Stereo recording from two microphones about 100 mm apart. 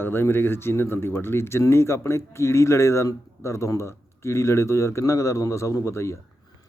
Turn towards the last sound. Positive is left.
turn(degrees=30)  # may be behind; listen again after turning